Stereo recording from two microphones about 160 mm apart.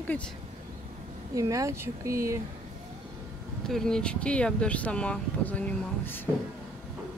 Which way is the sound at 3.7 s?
5° left (ahead or behind).